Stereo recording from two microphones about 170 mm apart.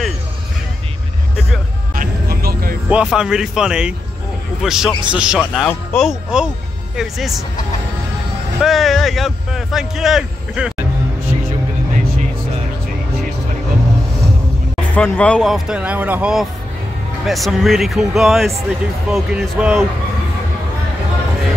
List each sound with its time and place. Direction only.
2.0 s vehicle: 60° right (ahead or behind)
2.9 s speech: 5° right (ahead or behind)
5.4 s speech: 5° left (ahead or behind)
8.6 s speech: centre (ahead or behind)
15.0 s speech: 5° left (ahead or behind)